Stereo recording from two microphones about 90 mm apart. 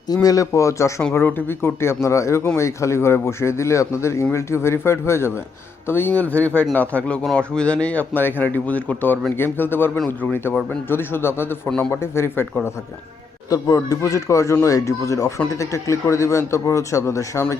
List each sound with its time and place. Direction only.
0.1 s speech: 45° left (ahead or behind)
1.1 s a man's voice: 20° left (ahead or behind)
13.5 s speech: 40° left (ahead or behind)